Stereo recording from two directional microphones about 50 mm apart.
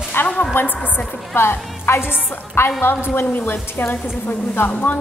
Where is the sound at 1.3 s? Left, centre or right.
Left.